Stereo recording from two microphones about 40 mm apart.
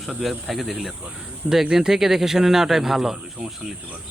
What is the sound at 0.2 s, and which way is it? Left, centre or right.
Speech, centre.